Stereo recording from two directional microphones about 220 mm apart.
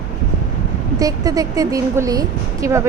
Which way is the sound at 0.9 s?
15° right (ahead or behind).